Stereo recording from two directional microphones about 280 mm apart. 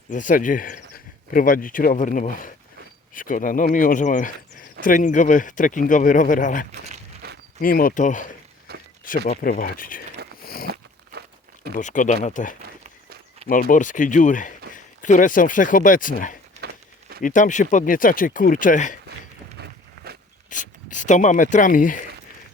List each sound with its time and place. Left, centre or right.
0.1 s speech: left
6.8 s a sound: right
7.6 s speech: left
8.7 s walk: right
9.0 s speech: left
10.4 s crunch: left
11.1 s crumpling: right
11.7 s speech: left
16.6 s crumpling: right
17.2 s speech: left
19.5 s a sound: right
20.5 s speech: left